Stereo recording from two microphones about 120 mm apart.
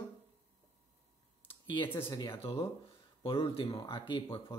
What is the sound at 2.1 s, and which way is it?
Speech, 40° left (ahead or behind).